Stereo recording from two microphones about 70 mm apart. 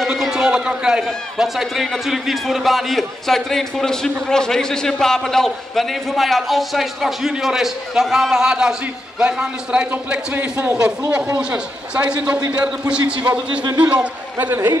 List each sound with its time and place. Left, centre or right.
0.0 s a man's voice: centre; by 10.7 s right
11.3 s a man's voice: centre